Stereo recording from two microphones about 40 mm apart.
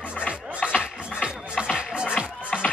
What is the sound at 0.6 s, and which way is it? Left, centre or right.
Music, right.